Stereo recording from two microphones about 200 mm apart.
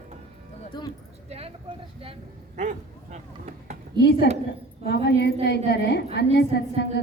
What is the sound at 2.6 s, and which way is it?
Speech, 35° right (ahead or behind).